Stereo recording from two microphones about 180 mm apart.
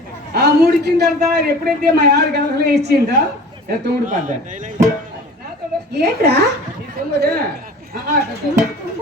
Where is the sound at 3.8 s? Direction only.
45° right (ahead or behind).